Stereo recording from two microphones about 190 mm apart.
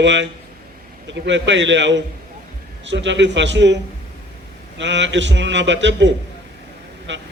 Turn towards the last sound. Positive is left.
turn(degrees=-70)  # may be behind; listen again after turning